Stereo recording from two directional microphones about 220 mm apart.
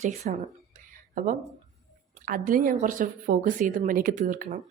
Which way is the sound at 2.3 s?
40° right (ahead or behind).